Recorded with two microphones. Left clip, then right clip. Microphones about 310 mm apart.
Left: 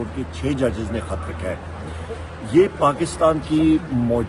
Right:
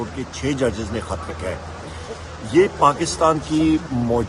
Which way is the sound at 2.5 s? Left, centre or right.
Right.